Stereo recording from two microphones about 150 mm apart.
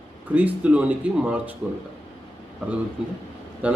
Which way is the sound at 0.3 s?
10° right (ahead or behind).